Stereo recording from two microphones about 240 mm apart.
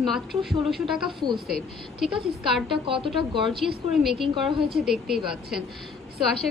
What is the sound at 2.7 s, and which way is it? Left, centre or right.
Speech, right.